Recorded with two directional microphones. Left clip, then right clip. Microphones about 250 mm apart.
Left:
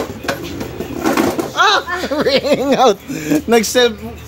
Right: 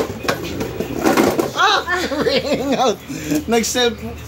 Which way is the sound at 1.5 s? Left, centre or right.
Left.